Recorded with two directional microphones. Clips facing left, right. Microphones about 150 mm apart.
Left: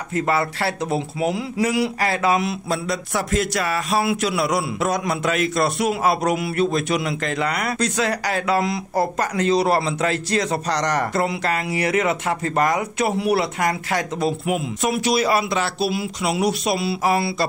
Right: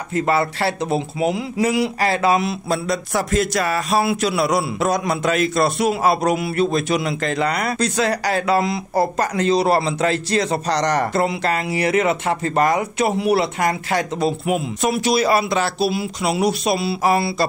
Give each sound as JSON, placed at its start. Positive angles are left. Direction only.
{"t": 0.1, "sound": "speech", "side_deg": -25}